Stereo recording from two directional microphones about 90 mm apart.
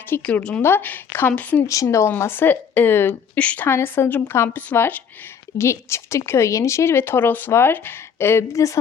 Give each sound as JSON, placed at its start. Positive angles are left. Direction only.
{"t": 0.1, "sound": "a woman's voice", "side_deg": 15}
{"t": 0.6, "sound": "a woman's voice", "side_deg": 20}
{"t": 1.6, "sound": "speech", "side_deg": 35}
{"t": 3.3, "sound": "a woman's voice", "side_deg": 15}
{"t": 3.7, "sound": "speech", "side_deg": 25}
{"t": 5.5, "sound": "speech", "side_deg": 30}